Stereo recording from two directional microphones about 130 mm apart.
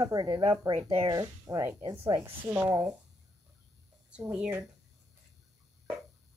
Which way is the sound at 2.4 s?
15° right (ahead or behind).